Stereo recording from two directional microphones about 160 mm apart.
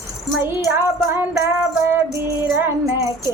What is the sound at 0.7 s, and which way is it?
Music, 15° right (ahead or behind).